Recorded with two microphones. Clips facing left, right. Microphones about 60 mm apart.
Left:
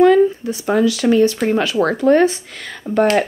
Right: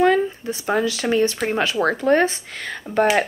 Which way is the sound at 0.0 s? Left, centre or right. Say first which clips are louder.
Left 6 dB; right.